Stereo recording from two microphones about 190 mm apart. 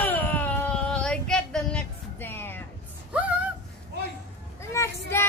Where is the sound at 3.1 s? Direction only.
5° right (ahead or behind).